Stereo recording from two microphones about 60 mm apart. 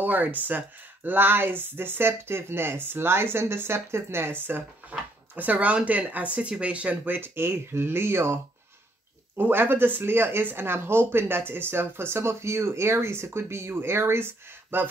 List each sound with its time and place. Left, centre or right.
0.0 s speech: right
7.2 s speech: right
9.4 s speech: right